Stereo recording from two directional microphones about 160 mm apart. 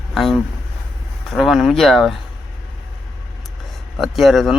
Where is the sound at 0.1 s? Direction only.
Centre (ahead or behind).